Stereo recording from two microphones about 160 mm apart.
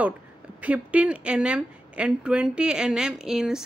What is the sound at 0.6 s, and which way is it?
A woman's voice, 10° right (ahead or behind).